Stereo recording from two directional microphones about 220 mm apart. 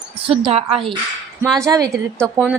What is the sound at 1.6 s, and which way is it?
Speech, 15° right (ahead or behind).